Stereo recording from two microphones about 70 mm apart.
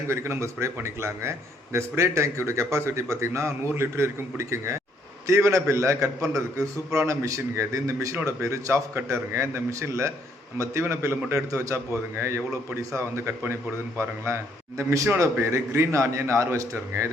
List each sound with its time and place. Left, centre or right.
0.1 s a man's voice: right
14.8 s a man's voice: right